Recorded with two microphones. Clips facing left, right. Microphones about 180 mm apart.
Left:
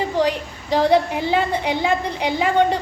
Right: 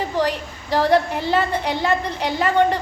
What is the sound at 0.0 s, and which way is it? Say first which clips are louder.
A woman's voice: left 2 dB; 15° left (ahead or behind).